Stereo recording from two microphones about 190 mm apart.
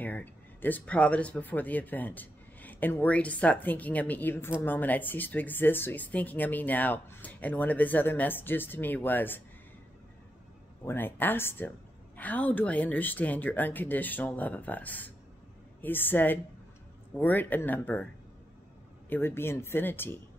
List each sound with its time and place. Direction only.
0.0 s speech: 10° left (ahead or behind)
10.9 s speech: 10° left (ahead or behind)
19.0 s speech: 10° left (ahead or behind)